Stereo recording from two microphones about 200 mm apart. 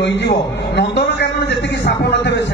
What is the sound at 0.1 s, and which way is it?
Speech, 60° left (ahead or behind).